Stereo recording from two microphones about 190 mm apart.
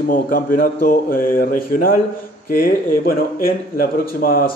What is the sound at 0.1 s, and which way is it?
Speech, 45° left (ahead or behind).